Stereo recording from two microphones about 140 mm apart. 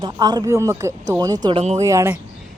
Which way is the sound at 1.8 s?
20° right (ahead or behind).